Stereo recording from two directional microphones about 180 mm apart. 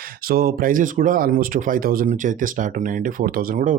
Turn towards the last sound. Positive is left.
turn(degrees=-50)  # may be behind; listen again after turning